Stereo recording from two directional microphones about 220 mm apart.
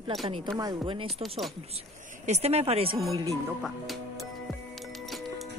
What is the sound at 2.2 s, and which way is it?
Speech, 30° right (ahead or behind).